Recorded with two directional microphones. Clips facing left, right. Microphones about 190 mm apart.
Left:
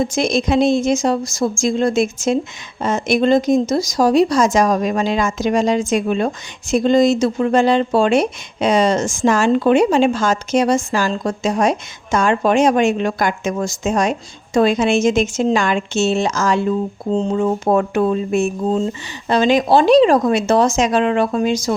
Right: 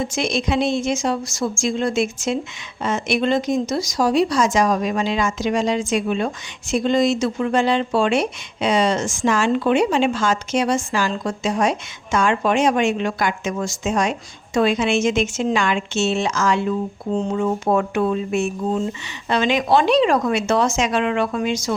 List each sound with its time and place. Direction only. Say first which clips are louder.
0.0 s speech: left 5 dB; 40° left (ahead or behind)